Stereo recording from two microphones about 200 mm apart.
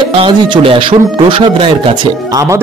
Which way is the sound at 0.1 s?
25° right (ahead or behind).